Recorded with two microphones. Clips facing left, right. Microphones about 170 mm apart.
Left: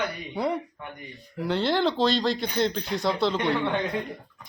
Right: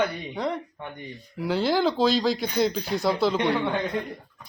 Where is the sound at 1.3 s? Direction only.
5° right (ahead or behind).